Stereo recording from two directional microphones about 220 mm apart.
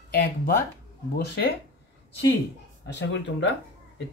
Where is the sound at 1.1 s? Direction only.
45° left (ahead or behind).